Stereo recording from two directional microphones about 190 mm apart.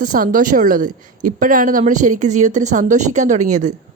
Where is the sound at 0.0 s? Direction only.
45° right (ahead or behind).